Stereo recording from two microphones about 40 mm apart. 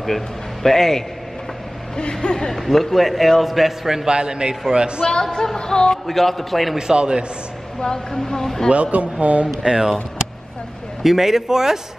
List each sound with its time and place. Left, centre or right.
0.0 s a man's voice: centre
2.0 s speech: left
2.5 s a man's voice: centre; by 5.0 s right
5.0 s speech: centre
6.0 s a man's voice: centre
6.9 s a man's voice: right
7.8 s speech: centre
8.9 s speech: right
9.7 s a man's voice: centre
11.0 s a man's voice: centre